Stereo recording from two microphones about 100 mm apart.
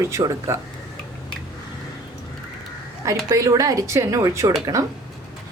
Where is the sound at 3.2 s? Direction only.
35° right (ahead or behind).